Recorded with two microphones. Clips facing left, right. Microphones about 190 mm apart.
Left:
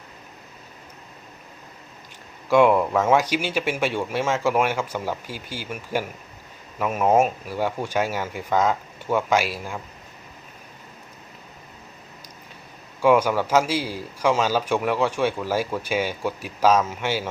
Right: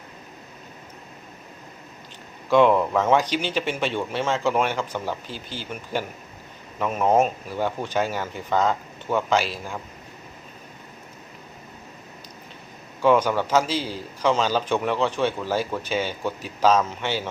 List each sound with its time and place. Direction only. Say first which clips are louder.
2.5 s a man's voice: even; 10° left (ahead or behind)
13.0 s a man's voice: left 1 dB; 10° left (ahead or behind)